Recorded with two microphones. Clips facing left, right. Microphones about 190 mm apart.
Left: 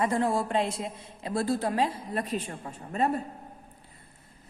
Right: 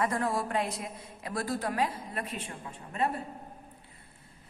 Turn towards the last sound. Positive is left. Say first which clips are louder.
# left 4 dB
turn(degrees=40)  # may be behind; listen again after turning